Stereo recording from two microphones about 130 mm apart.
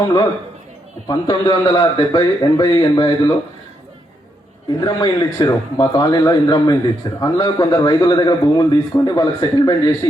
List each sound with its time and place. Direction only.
1.0 s a man's voice: 30° left (ahead or behind)
4.8 s a man's voice: 30° left (ahead or behind)